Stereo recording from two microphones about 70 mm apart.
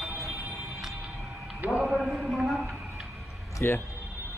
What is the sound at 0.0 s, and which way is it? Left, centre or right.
Music, centre.